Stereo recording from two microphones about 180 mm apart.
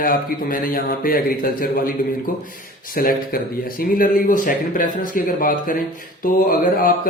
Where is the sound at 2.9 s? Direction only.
55° left (ahead or behind).